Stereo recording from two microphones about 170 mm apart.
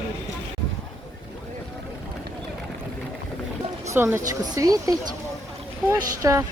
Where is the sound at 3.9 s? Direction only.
15° right (ahead or behind).